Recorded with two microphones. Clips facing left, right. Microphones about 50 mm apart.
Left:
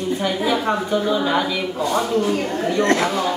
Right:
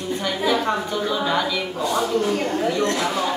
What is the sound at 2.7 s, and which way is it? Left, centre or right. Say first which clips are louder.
Speech: left 4 dB; left.